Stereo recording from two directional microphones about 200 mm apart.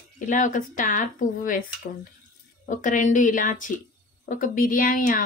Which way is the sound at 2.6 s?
40° left (ahead or behind).